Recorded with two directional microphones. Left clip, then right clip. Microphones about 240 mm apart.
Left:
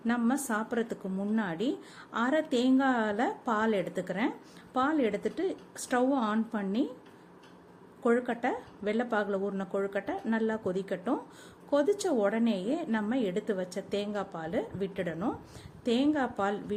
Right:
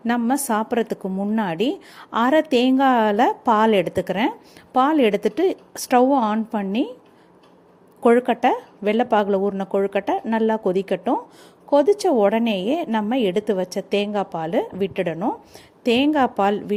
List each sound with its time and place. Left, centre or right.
0.0 s a woman's voice: right
8.0 s a woman's voice: right